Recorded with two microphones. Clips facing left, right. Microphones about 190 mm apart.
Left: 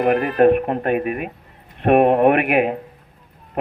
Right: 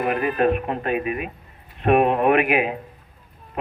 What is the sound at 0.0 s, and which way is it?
A man's voice, 65° left (ahead or behind).